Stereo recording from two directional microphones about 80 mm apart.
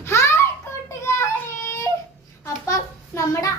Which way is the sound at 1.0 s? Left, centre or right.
Left.